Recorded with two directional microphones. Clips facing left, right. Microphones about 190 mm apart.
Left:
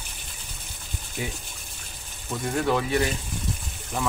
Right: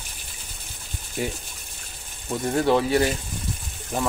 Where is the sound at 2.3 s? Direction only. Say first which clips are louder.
Right 4 dB; 30° right (ahead or behind).